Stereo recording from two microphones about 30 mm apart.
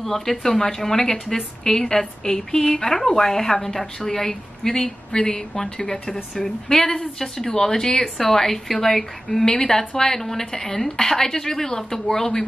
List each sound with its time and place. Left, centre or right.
0.0 s a woman's voice: centre
5.1 s a woman's voice: left